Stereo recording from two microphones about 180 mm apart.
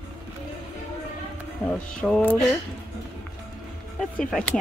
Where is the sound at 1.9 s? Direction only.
5° left (ahead or behind).